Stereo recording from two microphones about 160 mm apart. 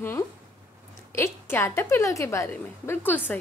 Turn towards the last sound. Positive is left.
turn(degrees=10)  # may be behind; listen again after turning